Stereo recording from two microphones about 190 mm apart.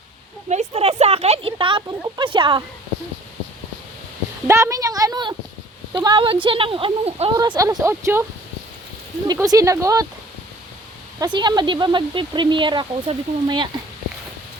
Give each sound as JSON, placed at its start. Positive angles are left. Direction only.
{"t": 0.4, "sound": "speech", "side_deg": -35}
{"t": 4.4, "sound": "a woman's voice", "side_deg": -15}
{"t": 7.3, "sound": "a woman's voice", "side_deg": -20}
{"t": 9.2, "sound": "a woman's voice", "side_deg": -20}
{"t": 11.2, "sound": "speech", "side_deg": -25}